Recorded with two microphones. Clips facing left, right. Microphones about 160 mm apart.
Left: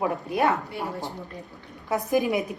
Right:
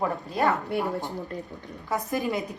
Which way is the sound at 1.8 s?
15° left (ahead or behind).